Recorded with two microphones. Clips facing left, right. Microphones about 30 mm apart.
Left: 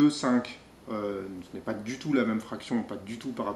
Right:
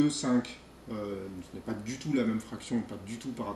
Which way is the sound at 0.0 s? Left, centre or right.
Centre.